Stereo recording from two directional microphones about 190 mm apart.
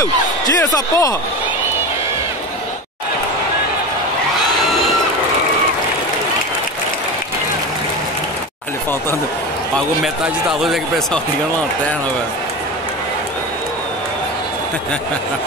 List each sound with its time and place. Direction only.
0.6 s speech: 20° left (ahead or behind)